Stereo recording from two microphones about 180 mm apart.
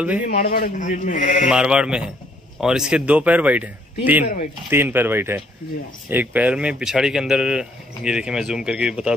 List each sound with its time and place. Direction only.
0.2 s a man's voice: 55° left (ahead or behind)
1.4 s a man's voice: 5° right (ahead or behind)